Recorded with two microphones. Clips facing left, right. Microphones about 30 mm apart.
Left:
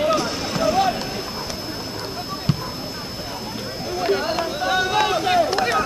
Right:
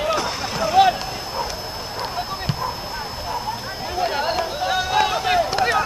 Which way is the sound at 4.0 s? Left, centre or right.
Centre.